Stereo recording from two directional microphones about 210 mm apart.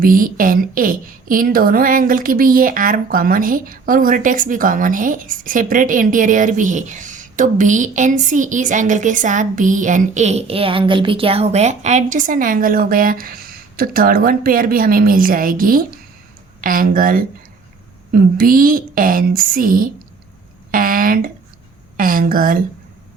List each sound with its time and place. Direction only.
0.0 s a woman's voice: 40° right (ahead or behind)